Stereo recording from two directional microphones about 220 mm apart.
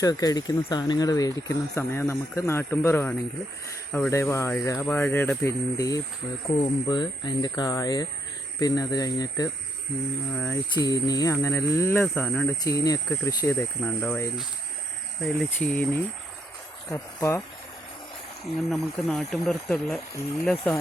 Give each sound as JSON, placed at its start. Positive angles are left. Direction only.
{"t": 0.0, "sound": "speech", "side_deg": 15}
{"t": 18.7, "sound": "speech", "side_deg": 0}